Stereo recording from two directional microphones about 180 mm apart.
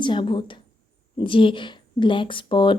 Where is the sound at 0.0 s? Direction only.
25° left (ahead or behind).